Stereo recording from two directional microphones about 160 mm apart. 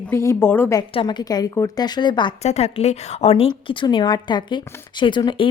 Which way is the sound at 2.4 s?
40° left (ahead or behind).